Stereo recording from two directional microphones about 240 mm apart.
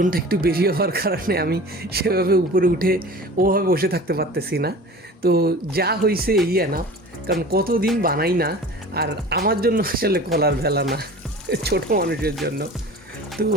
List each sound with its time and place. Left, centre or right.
0.0 s speech: right